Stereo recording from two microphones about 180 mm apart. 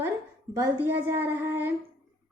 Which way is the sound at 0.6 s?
10° right (ahead or behind).